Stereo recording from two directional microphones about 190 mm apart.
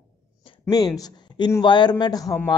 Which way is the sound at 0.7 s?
20° left (ahead or behind).